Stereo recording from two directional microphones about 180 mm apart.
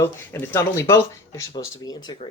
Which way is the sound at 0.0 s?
15° left (ahead or behind).